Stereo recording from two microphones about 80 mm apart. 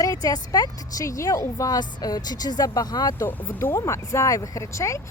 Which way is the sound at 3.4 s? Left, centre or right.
Left.